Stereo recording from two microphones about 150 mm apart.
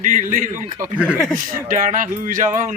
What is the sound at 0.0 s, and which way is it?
Speech, 60° right (ahead or behind).